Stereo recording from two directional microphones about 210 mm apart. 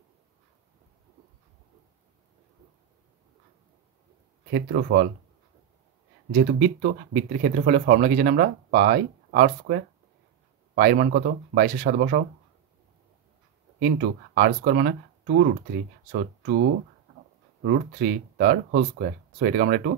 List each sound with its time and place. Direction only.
4.5 s speech: 50° right (ahead or behind)
6.3 s speech: 40° right (ahead or behind)
13.7 s speech: 40° right (ahead or behind)
17.6 s speech: 45° right (ahead or behind)